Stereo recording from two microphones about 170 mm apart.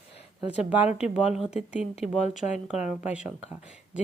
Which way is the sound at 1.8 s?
40° left (ahead or behind).